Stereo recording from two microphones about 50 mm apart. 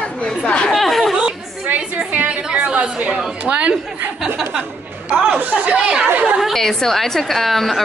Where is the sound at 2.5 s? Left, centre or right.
Centre.